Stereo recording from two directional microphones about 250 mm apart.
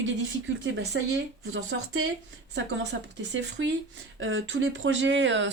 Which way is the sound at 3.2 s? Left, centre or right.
Right.